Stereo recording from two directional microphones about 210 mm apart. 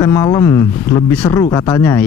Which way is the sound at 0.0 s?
15° left (ahead or behind).